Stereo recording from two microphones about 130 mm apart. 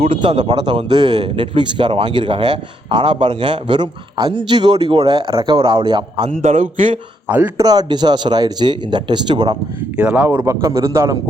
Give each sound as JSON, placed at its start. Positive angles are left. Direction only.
{"t": 0.0, "sound": "a man's voice", "side_deg": -40}
{"t": 6.2, "sound": "speech", "side_deg": -75}
{"t": 6.7, "sound": "a man's voice", "side_deg": -50}
{"t": 7.3, "sound": "a man's voice", "side_deg": -10}
{"t": 7.5, "sound": "a man's voice", "side_deg": -30}
{"t": 10.0, "sound": "a man's voice", "side_deg": -10}